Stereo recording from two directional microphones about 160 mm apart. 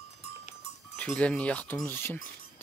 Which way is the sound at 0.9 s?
10° left (ahead or behind).